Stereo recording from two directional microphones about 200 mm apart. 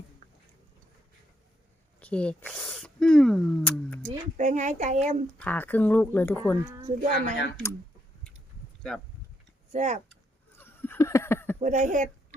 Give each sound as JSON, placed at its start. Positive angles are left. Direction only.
{"t": 2.0, "sound": "speech", "side_deg": 5}
{"t": 4.4, "sound": "a woman's voice", "side_deg": -35}
{"t": 5.4, "sound": "speech", "side_deg": 10}
{"t": 6.8, "sound": "a woman's voice", "side_deg": -35}
{"t": 7.5, "sound": "speech", "side_deg": 10}
{"t": 9.7, "sound": "a woman's voice", "side_deg": -35}
{"t": 10.1, "sound": "a sound", "side_deg": 10}
{"t": 11.6, "sound": "a woman's voice", "side_deg": -40}